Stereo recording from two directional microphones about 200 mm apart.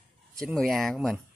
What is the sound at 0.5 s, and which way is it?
Speech, centre (ahead or behind).